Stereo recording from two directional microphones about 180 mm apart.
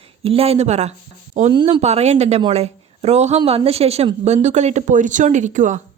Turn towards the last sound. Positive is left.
turn(degrees=-45)  # may be behind; listen again after turning